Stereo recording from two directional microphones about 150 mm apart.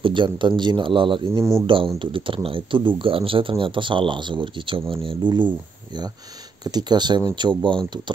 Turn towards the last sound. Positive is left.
turn(degrees=-30)  # may be behind; listen again after turning